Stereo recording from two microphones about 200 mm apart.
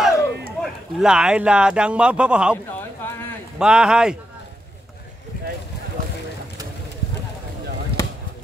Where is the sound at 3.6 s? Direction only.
5° right (ahead or behind).